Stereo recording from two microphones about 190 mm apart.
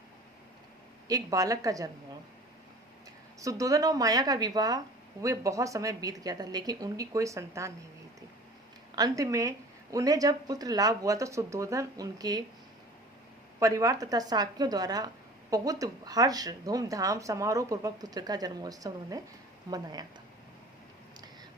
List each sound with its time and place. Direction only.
1.0 s speech: 20° right (ahead or behind)
3.4 s a woman's voice: 15° right (ahead or behind)
9.0 s speech: 20° right (ahead or behind)
13.6 s a woman's voice: 15° right (ahead or behind)